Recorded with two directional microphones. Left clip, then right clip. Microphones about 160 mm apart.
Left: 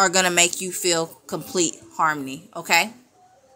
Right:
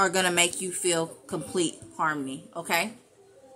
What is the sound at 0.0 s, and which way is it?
Speech, 25° left (ahead or behind).